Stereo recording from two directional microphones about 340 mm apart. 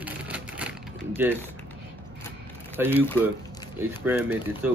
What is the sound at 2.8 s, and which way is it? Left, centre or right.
Speech, centre.